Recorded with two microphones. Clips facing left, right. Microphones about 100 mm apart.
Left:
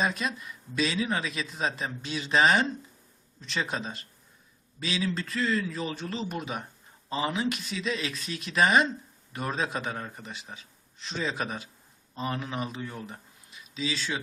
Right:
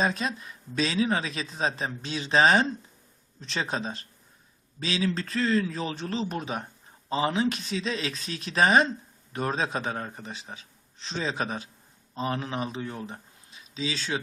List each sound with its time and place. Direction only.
0.0 s speech: 30° right (ahead or behind)